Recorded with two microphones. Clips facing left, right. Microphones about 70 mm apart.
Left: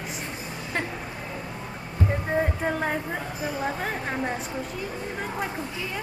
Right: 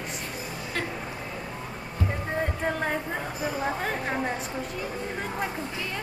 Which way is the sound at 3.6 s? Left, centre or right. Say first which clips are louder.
Even; centre.